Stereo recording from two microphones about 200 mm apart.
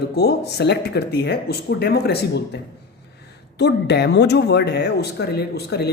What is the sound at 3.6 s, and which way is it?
Speech, 55° left (ahead or behind).